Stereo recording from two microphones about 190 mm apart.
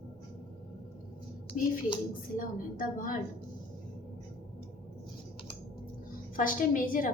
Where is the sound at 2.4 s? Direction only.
45° left (ahead or behind).